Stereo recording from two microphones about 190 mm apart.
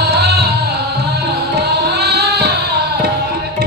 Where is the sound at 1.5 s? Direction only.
60° right (ahead or behind).